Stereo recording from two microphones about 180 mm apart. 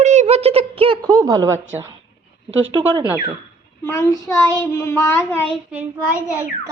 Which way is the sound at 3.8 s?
20° left (ahead or behind).